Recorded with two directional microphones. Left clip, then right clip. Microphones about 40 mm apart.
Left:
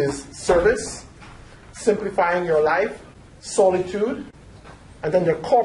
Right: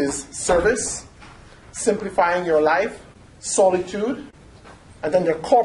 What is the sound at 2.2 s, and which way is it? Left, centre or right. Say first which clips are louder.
Speech: right 3 dB; right.